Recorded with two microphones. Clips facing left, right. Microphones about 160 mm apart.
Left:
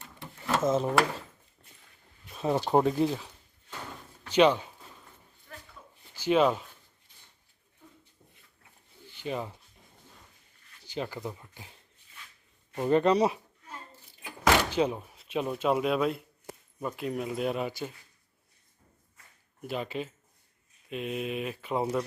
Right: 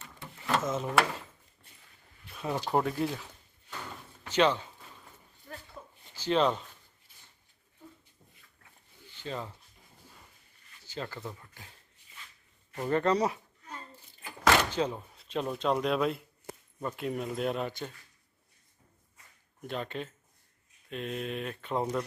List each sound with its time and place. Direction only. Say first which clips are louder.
0.6 s speech: left 6 dB; 30° left (ahead or behind)
2.4 s speech: left 5 dB; 25° left (ahead or behind)
4.4 s speech: left 4 dB; 15° left (ahead or behind)
5.5 s a sound: right 3 dB; 45° right (ahead or behind)
6.1 s speech: left 3 dB; 10° left (ahead or behind)
9.1 s speech: left 4 dB; 15° left (ahead or behind)
10.8 s speech: left 4 dB; 15° left (ahead or behind)
14.2 s door: left 1 dB; 15° left (ahead or behind)
16.8 s speech: left 1 dB; centre (ahead or behind)
19.6 s speech: left 2 dB; 5° left (ahead or behind)